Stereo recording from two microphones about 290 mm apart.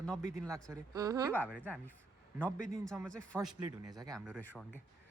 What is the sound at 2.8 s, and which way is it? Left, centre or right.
Speech, centre.